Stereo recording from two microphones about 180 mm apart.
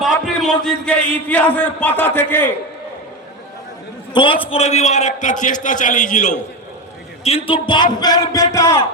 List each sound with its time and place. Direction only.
0.0 s a man's voice: centre (ahead or behind)
4.1 s a man's voice: 25° left (ahead or behind); by 6.4 s 45° left (ahead or behind)
7.3 s a man's voice: 30° left (ahead or behind); by 8.8 s 15° left (ahead or behind)